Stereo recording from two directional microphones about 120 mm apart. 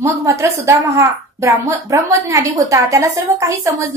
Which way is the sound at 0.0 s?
25° right (ahead or behind).